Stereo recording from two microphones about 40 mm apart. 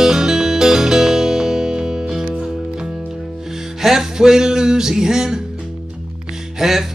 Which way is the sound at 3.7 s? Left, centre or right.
Centre.